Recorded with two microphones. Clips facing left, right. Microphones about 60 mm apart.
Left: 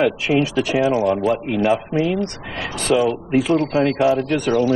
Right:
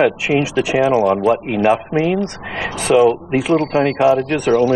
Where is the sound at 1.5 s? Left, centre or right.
Right.